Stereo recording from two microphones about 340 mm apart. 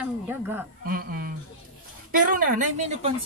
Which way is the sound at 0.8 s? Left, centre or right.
Right.